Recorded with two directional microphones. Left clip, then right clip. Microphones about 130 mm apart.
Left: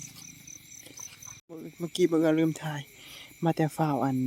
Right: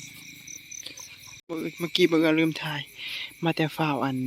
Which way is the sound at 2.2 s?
15° left (ahead or behind).